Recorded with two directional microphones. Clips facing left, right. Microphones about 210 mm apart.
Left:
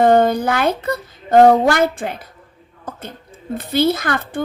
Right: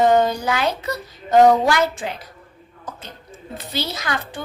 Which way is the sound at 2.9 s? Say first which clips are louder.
Left 4 dB; 55° left (ahead or behind).